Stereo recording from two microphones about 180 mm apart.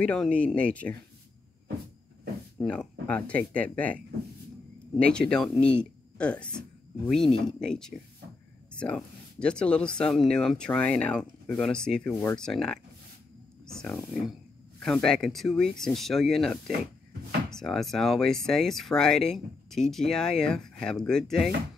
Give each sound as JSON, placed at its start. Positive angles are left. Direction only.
{"t": 0.0, "sound": "speech", "side_deg": 5}
{"t": 2.6, "sound": "speech", "side_deg": 5}
{"t": 12.1, "sound": "speech", "side_deg": 15}
{"t": 12.4, "sound": "speech", "side_deg": 5}
{"t": 14.8, "sound": "speech", "side_deg": 0}